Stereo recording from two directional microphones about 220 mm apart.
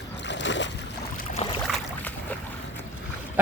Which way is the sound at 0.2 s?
55° left (ahead or behind).